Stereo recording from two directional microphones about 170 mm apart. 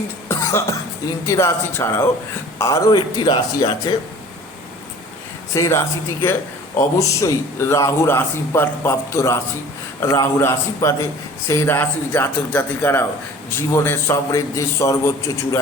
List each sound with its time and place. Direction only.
0.3 s cough: 15° left (ahead or behind)
1.2 s a man's voice: 15° left (ahead or behind)
5.5 s a man's voice: 20° left (ahead or behind)